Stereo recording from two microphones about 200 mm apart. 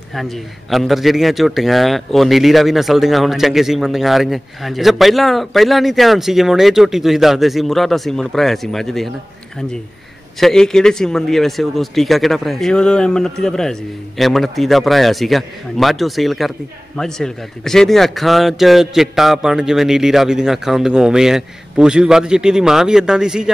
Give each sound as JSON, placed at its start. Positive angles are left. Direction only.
{"t": 0.1, "sound": "speech", "side_deg": 0}
{"t": 10.4, "sound": "speech", "side_deg": 5}